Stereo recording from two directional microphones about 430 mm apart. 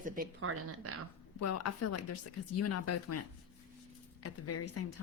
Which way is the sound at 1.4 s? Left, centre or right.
Left.